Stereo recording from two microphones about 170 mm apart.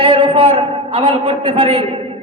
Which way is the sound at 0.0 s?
30° right (ahead or behind).